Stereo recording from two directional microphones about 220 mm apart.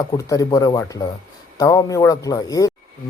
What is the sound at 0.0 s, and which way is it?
Speech, 15° left (ahead or behind).